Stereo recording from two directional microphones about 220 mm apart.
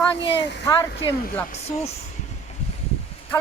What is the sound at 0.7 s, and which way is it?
Speech, 20° left (ahead or behind).